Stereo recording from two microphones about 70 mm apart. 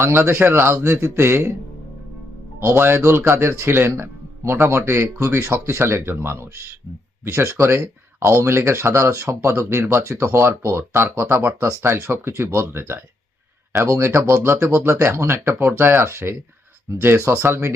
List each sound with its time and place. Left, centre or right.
0.0 s speech: right
2.6 s speech: right